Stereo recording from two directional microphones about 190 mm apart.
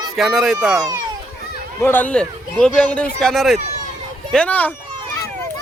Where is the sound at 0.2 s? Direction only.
Centre (ahead or behind).